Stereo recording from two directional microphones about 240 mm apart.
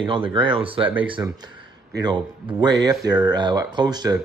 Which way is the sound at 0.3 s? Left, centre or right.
Centre.